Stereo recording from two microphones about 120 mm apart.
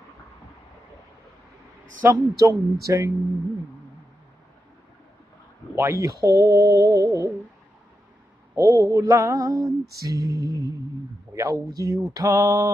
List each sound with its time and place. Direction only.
2.0 s mantra: 20° right (ahead or behind)
5.8 s mantra: 25° right (ahead or behind)
8.5 s mantra: 30° right (ahead or behind)